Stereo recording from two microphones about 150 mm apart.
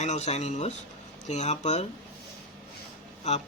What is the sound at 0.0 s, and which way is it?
Speech, 50° left (ahead or behind).